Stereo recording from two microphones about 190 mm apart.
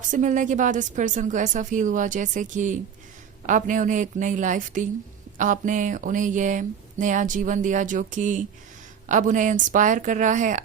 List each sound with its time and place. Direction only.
0.1 s a woman's voice: 40° right (ahead or behind)